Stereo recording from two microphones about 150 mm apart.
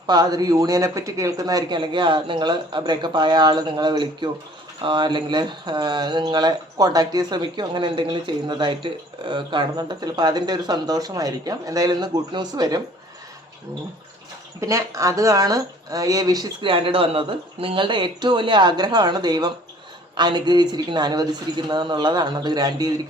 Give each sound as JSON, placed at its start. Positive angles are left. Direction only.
{"t": 0.1, "sound": "speech", "side_deg": -25}
{"t": 14.6, "sound": "speech", "side_deg": -20}